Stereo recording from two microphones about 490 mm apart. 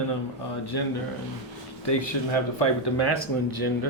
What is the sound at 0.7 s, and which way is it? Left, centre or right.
Speech, left.